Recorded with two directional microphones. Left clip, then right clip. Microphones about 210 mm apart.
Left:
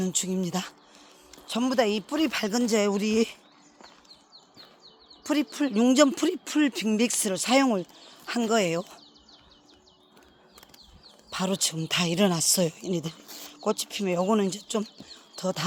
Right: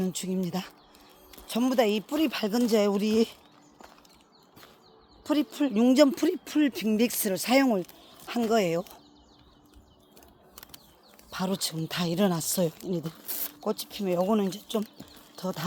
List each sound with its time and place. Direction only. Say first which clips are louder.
0.0 s speech: left 2 dB; 15° left (ahead or behind)
1.5 s speech: even; 5° left (ahead or behind)
5.2 s speech: even; 15° left (ahead or behind)
11.3 s speech: left 3 dB; 15° left (ahead or behind)
13.2 s a sound: right 2 dB; 35° right (ahead or behind)
13.7 s speech: left 2 dB; 15° left (ahead or behind)